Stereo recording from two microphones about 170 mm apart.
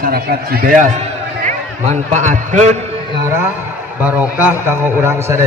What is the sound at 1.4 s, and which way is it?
A man's voice, 45° right (ahead or behind).